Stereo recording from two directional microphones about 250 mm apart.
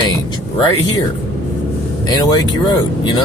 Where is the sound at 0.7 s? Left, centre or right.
Left.